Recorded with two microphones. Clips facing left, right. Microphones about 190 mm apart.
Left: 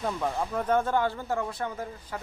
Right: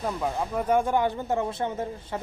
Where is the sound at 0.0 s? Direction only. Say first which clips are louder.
Right 1 dB; 5° right (ahead or behind).